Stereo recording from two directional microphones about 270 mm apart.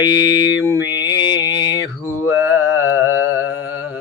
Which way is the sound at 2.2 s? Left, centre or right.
Left.